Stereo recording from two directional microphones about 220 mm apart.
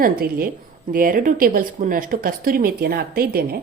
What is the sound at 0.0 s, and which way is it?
Speech, 40° right (ahead or behind).